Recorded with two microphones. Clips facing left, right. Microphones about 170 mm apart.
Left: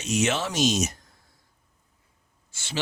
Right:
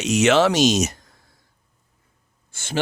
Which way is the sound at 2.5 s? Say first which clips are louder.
Right 7 dB; 50° right (ahead or behind).